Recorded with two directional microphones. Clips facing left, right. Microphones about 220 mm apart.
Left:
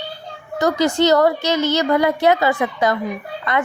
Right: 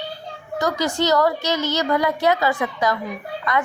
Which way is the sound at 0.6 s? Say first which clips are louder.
Left 5 dB; 25° left (ahead or behind).